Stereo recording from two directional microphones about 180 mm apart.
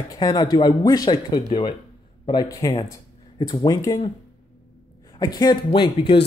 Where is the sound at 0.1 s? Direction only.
20° left (ahead or behind).